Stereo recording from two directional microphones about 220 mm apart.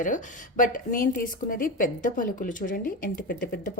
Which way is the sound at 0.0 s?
35° left (ahead or behind).